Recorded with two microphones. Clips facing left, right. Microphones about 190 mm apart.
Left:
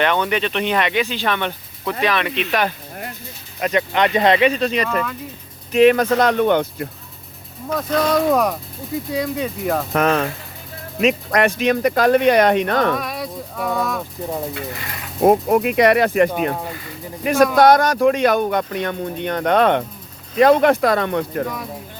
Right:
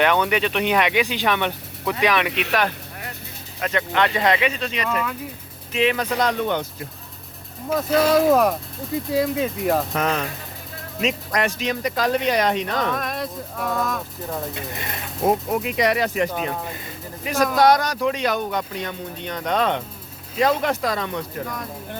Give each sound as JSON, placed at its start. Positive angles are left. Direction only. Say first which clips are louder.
{"t": 0.0, "sound": "speech", "louder": "even", "side_deg": -5}
{"t": 3.6, "sound": "speech", "louder": "left 3 dB", "side_deg": 20}
{"t": 4.9, "sound": "speech", "louder": "left 2 dB", "side_deg": -5}
{"t": 5.7, "sound": "speech", "louder": "left 8 dB", "side_deg": 50}
{"t": 7.7, "sound": "speech", "louder": "right 1 dB", "side_deg": -5}
{"t": 9.9, "sound": "speech", "louder": "left 6 dB", "side_deg": 60}
{"t": 13.0, "sound": "speech", "louder": "left 1 dB", "side_deg": 0}
{"t": 14.5, "sound": "speech", "louder": "left 2 dB", "side_deg": -20}
{"t": 15.2, "sound": "speech", "louder": "left 7 dB", "side_deg": 55}